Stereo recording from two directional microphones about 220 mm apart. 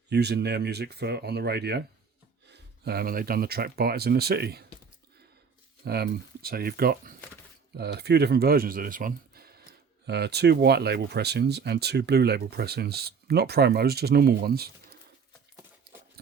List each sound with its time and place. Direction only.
0.1 s speech: 50° right (ahead or behind)
5.8 s speech: 45° right (ahead or behind)
16.2 s a sound: 45° right (ahead or behind)